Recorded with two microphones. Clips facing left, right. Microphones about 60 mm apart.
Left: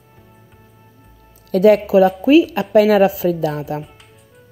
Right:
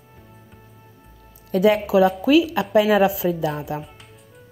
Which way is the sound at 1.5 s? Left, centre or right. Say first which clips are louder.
Left 6 dB; left.